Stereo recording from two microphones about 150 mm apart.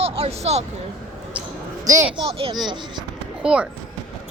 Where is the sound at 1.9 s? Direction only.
25° right (ahead or behind).